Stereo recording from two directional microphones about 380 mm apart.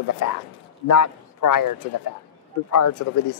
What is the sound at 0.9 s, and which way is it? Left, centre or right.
A man's voice, left.